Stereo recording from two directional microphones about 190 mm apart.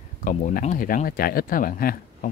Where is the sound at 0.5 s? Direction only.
45° left (ahead or behind).